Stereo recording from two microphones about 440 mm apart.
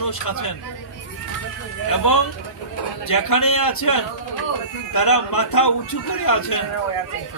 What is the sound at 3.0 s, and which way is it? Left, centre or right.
A man's voice, left.